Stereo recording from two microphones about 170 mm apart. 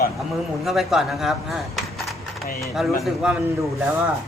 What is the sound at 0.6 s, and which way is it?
Speech, centre (ahead or behind).